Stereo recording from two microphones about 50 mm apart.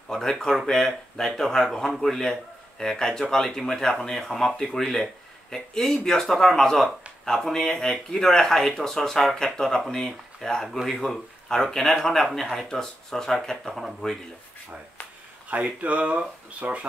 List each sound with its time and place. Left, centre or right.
0.1 s speech: centre
15.5 s speech: right